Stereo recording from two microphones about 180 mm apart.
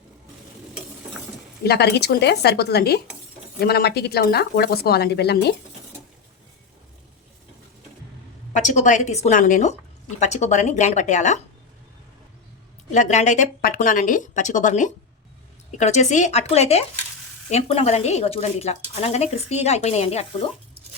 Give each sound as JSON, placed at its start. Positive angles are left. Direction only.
{"t": 1.6, "sound": "a woman's voice", "side_deg": 65}
{"t": 8.5, "sound": "a woman's voice", "side_deg": 45}
{"t": 12.9, "sound": "a woman's voice", "side_deg": 40}